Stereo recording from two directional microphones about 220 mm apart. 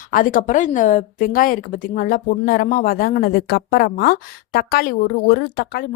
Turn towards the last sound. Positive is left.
turn(degrees=45)  # may be behind; listen again after turning